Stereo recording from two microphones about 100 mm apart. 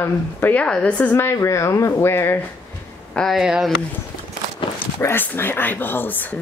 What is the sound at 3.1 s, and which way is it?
Speech, 5° left (ahead or behind).